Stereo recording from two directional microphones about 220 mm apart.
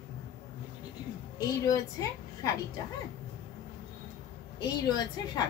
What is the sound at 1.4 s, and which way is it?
A woman's voice, 15° left (ahead or behind).